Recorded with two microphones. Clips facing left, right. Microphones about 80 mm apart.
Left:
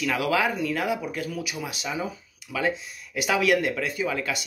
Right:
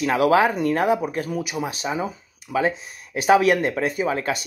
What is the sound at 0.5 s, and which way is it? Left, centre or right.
Speech, right.